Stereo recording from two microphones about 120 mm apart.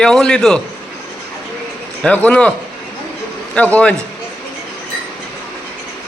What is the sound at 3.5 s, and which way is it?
Speech, 10° left (ahead or behind).